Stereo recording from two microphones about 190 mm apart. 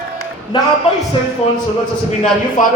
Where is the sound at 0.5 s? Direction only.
20° left (ahead or behind).